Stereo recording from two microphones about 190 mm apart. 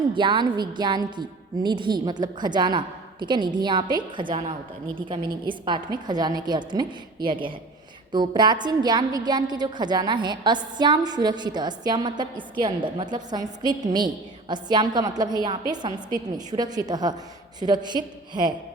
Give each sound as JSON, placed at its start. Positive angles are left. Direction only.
{"t": 0.1, "sound": "a woman's voice", "side_deg": -25}